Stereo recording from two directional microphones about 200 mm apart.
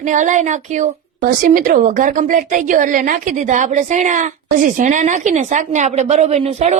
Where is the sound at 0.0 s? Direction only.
40° right (ahead or behind).